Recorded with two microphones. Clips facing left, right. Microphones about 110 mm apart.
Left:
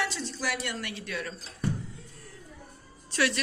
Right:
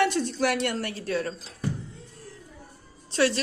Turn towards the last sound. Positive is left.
turn(degrees=-30)  # may be behind; listen again after turning